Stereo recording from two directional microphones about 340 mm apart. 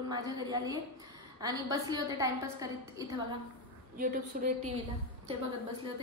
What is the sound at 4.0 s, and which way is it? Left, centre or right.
Speech, right.